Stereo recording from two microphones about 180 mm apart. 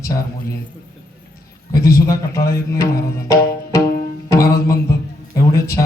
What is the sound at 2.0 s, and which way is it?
Speech, 15° left (ahead or behind).